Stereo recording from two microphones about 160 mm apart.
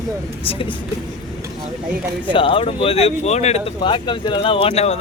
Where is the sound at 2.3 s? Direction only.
35° left (ahead or behind).